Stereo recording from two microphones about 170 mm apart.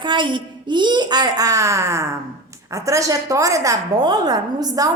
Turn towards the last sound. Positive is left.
turn(degrees=-20)  # may be behind; listen again after turning